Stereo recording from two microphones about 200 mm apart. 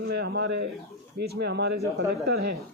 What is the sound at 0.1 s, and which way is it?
A man's voice, 55° right (ahead or behind).